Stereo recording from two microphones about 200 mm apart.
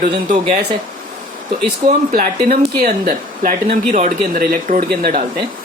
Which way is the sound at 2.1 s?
45° right (ahead or behind).